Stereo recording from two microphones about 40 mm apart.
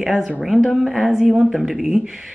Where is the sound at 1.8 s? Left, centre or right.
Centre.